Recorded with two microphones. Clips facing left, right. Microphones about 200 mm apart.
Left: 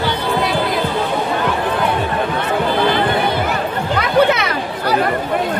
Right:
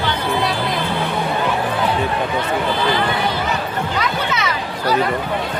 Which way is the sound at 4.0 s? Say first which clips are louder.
Left 8 dB; 60° left (ahead or behind).